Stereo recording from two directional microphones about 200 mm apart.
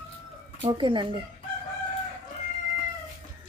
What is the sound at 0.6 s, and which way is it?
Speech, 25° right (ahead or behind).